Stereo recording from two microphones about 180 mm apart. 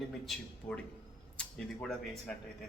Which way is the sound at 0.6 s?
5° left (ahead or behind).